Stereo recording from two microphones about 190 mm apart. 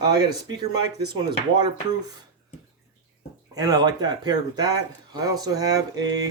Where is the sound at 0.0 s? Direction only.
20° right (ahead or behind).